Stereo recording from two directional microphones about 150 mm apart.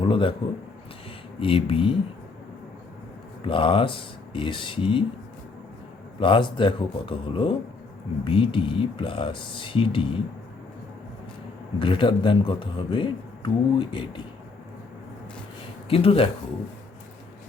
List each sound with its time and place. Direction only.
0.0 s speech: 35° left (ahead or behind)
1.4 s a man's voice: 35° left (ahead or behind)
3.4 s a man's voice: 35° left (ahead or behind)
6.1 s a man's voice: 35° left (ahead or behind)
11.8 s a man's voice: 35° left (ahead or behind)
15.9 s a man's voice: 40° left (ahead or behind)